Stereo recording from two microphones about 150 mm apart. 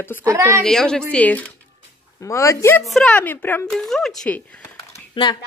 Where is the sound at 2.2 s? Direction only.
20° left (ahead or behind).